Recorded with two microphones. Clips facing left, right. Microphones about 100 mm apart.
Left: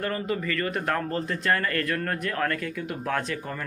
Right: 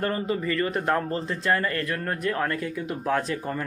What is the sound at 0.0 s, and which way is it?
A man's voice, 30° right (ahead or behind).